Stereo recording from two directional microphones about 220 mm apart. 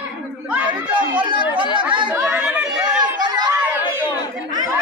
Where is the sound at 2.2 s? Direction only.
5° right (ahead or behind).